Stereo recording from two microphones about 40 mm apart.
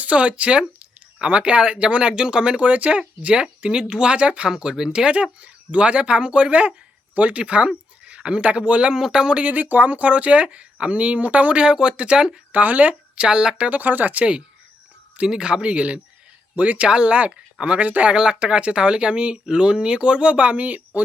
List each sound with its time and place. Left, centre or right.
0.0 s speech: right
2.6 s speech: right
4.4 s speech: centre; by 8.9 s right
8.9 s speech: centre
9.4 s speech: right
11.6 s speech: right
12.5 s speech: right
13.1 s speech: right
13.7 s speech: right
15.3 s speech: right
18.1 s speech: right